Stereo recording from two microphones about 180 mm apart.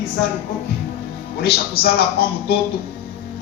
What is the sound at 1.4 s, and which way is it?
Speech, 60° left (ahead or behind).